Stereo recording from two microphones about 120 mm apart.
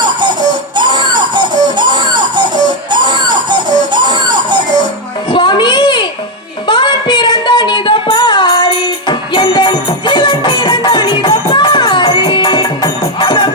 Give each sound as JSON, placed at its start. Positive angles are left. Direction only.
{"t": 0.8, "sound": "music", "side_deg": -40}
{"t": 5.3, "sound": "music", "side_deg": 40}